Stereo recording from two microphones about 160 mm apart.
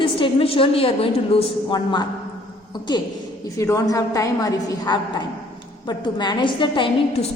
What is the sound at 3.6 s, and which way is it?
A woman's voice, 20° left (ahead or behind).